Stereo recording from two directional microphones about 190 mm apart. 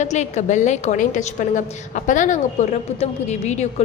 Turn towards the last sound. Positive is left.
turn(degrees=35)  # may be behind; listen again after turning